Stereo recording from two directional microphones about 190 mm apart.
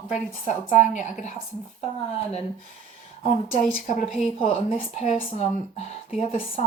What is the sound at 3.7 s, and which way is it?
Speech, 45° left (ahead or behind).